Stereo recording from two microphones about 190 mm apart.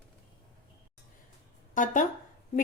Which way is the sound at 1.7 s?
45° left (ahead or behind).